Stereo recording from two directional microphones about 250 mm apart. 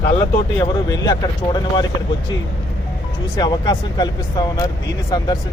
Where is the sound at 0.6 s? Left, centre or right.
Centre.